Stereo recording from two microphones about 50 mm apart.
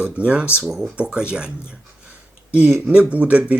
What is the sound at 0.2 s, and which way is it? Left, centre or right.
Speech, right.